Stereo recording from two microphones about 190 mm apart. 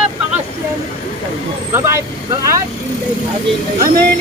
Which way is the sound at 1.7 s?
15° right (ahead or behind).